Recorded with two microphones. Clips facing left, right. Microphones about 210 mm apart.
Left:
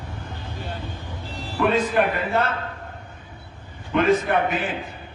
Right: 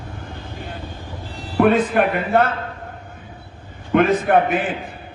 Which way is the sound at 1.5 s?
55° right (ahead or behind).